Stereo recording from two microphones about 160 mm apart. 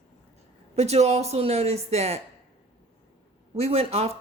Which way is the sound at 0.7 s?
40° right (ahead or behind).